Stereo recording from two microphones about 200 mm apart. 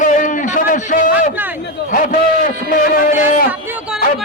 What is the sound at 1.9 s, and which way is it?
A man's voice, 40° left (ahead or behind).